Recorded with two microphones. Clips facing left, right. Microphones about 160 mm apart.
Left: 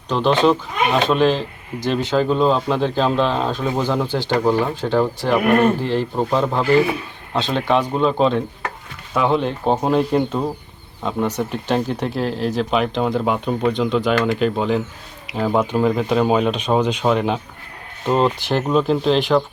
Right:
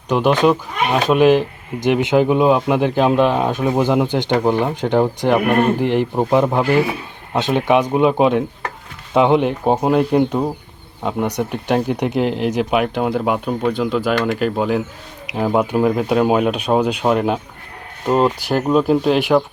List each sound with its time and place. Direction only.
0.1 s speech: 15° right (ahead or behind)